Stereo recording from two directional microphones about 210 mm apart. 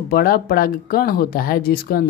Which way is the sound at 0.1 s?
45° left (ahead or behind).